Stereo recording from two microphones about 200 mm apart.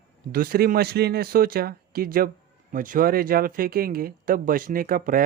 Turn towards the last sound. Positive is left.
turn(degrees=-45)  # may be behind; listen again after turning